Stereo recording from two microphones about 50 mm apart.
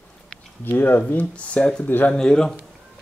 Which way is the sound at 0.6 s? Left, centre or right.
Left.